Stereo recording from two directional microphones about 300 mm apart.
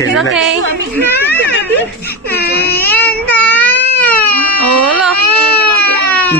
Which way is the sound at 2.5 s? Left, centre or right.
Centre.